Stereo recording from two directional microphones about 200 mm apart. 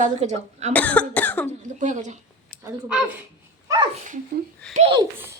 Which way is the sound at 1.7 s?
40° right (ahead or behind).